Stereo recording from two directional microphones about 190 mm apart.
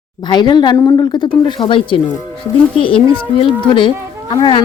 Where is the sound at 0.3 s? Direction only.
25° left (ahead or behind).